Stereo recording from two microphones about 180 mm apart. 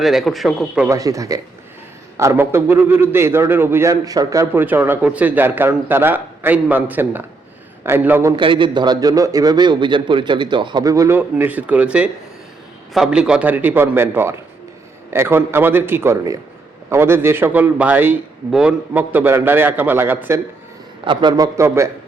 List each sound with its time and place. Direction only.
0.0 s speech: centre (ahead or behind)
0.9 s a man's voice: 20° right (ahead or behind)
8.4 s a man's voice: 30° right (ahead or behind); by 20.4 s 10° right (ahead or behind)
21.0 s a man's voice: 25° right (ahead or behind)